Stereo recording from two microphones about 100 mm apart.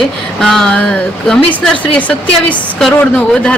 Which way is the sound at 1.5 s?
15° left (ahead or behind).